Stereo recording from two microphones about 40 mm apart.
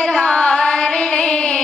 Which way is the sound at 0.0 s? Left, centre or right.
Centre.